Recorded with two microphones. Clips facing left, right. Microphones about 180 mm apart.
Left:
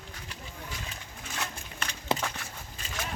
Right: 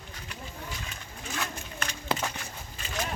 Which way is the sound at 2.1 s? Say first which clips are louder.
Left 1 dB; 25° left (ahead or behind).